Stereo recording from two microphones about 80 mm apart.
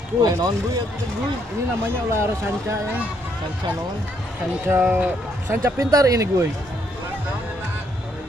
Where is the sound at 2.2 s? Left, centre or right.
Right.